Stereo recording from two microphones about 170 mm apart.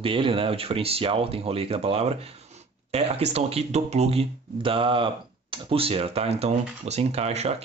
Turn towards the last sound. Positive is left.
turn(degrees=-40)  # may be behind; listen again after turning